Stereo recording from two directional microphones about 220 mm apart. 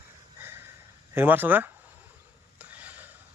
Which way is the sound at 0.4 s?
10° right (ahead or behind).